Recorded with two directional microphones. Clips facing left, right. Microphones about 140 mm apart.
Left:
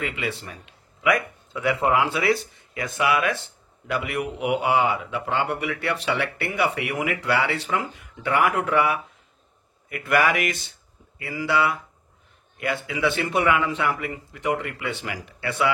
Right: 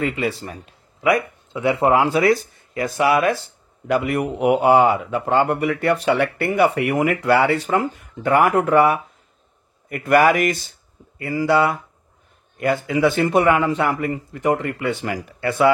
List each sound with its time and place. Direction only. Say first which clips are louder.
0.0 s speech: right 7 dB; 40° right (ahead or behind)